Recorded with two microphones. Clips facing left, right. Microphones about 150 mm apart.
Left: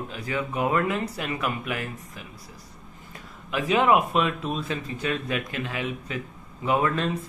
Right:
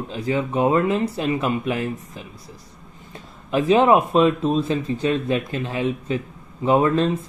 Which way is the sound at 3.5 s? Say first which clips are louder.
Right 5 dB; 30° right (ahead or behind).